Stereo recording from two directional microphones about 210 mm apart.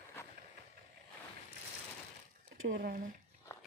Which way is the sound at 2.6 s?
65° right (ahead or behind).